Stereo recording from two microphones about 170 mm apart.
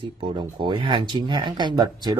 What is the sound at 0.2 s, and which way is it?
Speech, 30° right (ahead or behind).